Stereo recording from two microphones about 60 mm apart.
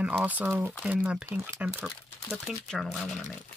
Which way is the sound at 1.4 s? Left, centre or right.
Right.